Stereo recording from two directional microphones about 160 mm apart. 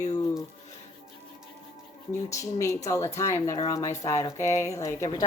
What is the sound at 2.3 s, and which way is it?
Speech, 20° left (ahead or behind).